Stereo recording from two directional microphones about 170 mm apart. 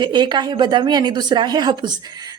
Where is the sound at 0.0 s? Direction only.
25° right (ahead or behind).